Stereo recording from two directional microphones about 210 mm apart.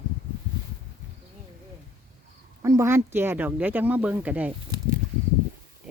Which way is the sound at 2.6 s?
15° right (ahead or behind).